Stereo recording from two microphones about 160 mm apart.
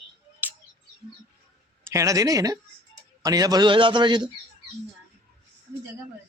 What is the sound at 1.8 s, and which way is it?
A man's voice, 20° right (ahead or behind).